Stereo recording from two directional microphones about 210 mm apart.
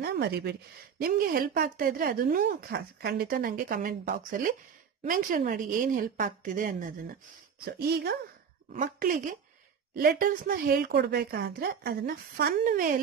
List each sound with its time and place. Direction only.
0.0 s a woman's voice: 50° right (ahead or behind)